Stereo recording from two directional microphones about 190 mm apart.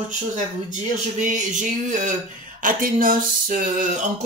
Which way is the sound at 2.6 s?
45° right (ahead or behind).